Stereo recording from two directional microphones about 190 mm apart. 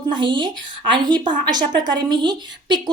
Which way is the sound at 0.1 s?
25° right (ahead or behind).